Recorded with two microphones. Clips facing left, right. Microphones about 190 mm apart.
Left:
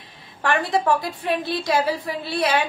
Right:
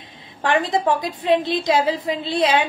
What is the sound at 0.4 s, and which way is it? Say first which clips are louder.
A woman's voice: right 2 dB; 20° right (ahead or behind).